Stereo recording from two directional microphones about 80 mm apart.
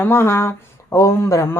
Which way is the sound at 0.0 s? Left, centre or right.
Left.